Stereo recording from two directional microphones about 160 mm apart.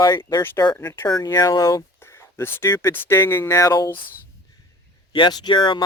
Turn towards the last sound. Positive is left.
turn(degrees=30)  # may be behind; listen again after turning